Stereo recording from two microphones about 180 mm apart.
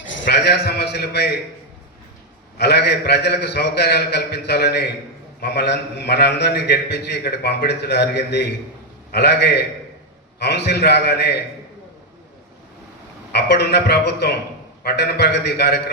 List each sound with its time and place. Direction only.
0.2 s a man's voice: 70° left (ahead or behind)
2.6 s a man's voice: 65° left (ahead or behind)
13.3 s a man's voice: 65° left (ahead or behind)